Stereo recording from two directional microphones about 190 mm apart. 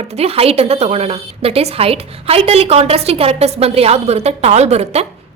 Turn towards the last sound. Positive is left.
turn(degrees=-35)  # may be behind; listen again after turning